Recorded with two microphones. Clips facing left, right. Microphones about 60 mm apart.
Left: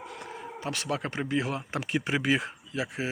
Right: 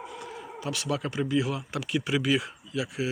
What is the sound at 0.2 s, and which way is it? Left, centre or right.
Speech, left.